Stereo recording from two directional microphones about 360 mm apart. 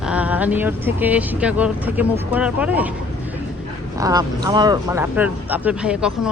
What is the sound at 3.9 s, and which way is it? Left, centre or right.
Speech, centre.